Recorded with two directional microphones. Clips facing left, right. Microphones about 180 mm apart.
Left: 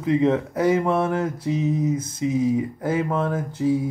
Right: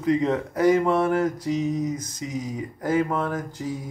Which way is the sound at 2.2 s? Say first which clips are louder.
Left 9 dB; 25° left (ahead or behind).